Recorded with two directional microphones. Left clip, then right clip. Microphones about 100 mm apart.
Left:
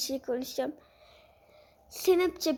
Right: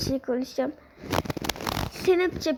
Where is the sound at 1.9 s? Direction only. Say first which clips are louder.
Right 2 dB; 15° left (ahead or behind).